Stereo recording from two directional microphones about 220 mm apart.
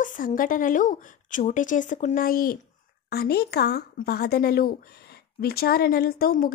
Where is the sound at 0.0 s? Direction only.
35° left (ahead or behind).